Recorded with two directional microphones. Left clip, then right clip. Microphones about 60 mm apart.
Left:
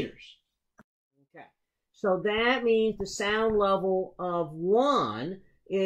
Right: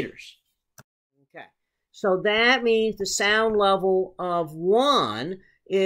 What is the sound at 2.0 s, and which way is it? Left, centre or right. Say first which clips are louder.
Speech: right 5 dB; centre.